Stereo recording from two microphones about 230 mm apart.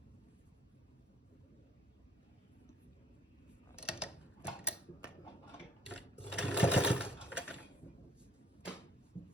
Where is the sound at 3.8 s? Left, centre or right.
Centre.